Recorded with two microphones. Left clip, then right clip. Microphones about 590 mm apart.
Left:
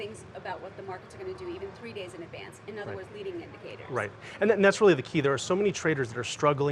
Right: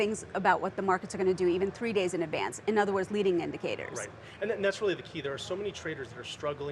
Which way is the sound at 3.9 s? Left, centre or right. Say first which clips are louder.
Left 8 dB; left.